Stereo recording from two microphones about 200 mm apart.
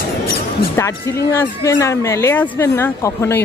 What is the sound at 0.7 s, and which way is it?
Speech, 15° left (ahead or behind).